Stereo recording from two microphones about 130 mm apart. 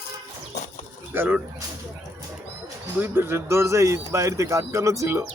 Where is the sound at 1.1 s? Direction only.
15° right (ahead or behind).